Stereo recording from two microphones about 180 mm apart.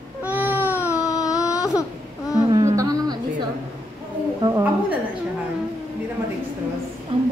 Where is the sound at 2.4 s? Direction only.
20° right (ahead or behind).